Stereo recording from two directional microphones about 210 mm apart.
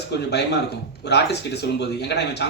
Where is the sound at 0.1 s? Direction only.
55° left (ahead or behind).